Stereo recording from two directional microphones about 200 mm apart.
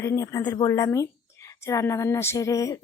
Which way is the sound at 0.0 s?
15° left (ahead or behind).